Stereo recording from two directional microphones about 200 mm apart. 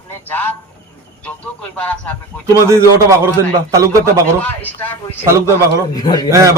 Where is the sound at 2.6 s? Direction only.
15° right (ahead or behind).